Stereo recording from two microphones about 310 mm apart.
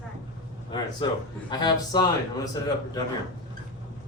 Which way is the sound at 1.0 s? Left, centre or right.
Centre.